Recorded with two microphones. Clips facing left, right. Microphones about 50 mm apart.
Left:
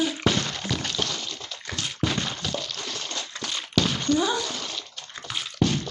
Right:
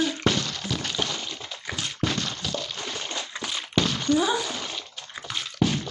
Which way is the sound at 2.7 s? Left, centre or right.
Centre.